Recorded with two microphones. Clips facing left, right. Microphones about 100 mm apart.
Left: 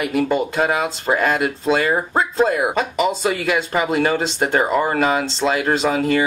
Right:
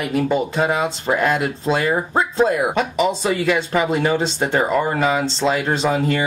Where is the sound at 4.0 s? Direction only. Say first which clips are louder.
Even; centre (ahead or behind).